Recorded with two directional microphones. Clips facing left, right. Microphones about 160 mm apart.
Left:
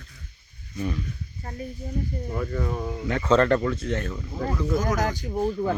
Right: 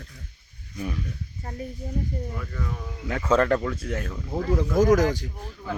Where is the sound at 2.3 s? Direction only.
35° left (ahead or behind).